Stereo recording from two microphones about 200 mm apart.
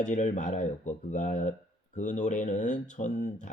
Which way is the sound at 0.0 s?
35° left (ahead or behind).